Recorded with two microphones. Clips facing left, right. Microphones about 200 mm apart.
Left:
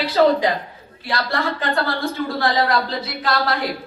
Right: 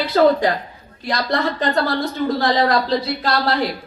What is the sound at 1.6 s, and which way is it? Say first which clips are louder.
A woman's voice: right 3 dB; 40° right (ahead or behind).